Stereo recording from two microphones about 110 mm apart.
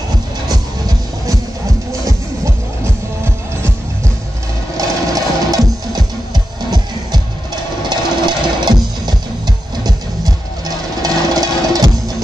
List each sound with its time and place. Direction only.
0.5 s music: 35° right (ahead or behind)
4.7 s music: 35° right (ahead or behind)
11.0 s music: 35° right (ahead or behind)